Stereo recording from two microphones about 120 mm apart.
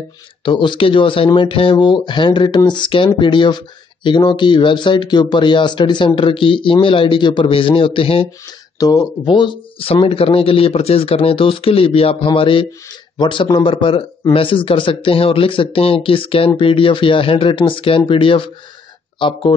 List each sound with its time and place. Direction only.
0.5 s speech: 45° left (ahead or behind)
8.7 s speech: 30° left (ahead or behind)
9.2 s speech: 40° left (ahead or behind)